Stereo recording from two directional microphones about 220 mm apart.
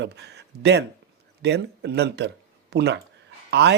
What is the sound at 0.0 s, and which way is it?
Speech, 50° right (ahead or behind).